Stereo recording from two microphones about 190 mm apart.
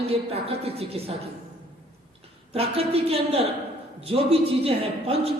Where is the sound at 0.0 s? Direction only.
30° right (ahead or behind).